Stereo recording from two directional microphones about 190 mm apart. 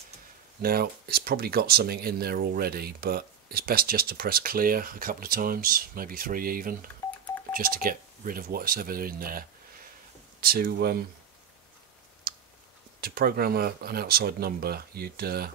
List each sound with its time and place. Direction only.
0.6 s speech: 50° right (ahead or behind)
12.3 s clicking: 55° right (ahead or behind)
13.0 s speech: 55° right (ahead or behind)